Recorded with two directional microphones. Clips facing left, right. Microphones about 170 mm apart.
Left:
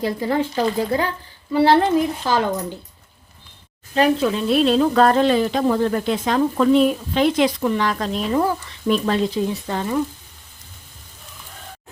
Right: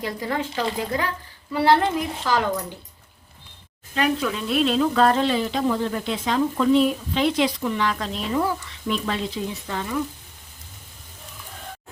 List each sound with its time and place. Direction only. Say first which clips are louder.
0.0 s a woman's voice: left 6 dB; 30° left (ahead or behind)
3.9 s speech: left 6 dB; 30° left (ahead or behind)